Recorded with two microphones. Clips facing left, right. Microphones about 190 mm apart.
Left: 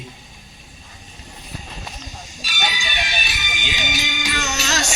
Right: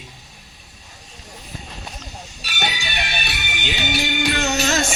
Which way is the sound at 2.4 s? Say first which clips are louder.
Even; 60° right (ahead or behind).